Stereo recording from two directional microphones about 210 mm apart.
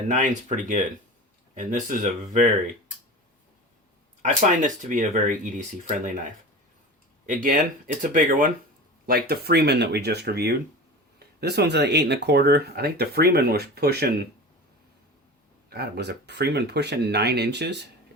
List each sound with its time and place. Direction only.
0.1 s speech: 35° right (ahead or behind)
4.2 s speech: 35° right (ahead or behind)
7.3 s speech: 40° right (ahead or behind)
15.7 s speech: 50° right (ahead or behind)